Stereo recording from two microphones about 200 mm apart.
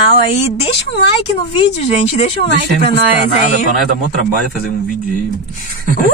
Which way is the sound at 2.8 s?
35° left (ahead or behind).